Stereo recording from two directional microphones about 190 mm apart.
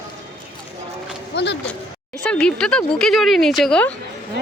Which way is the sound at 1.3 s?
65° left (ahead or behind).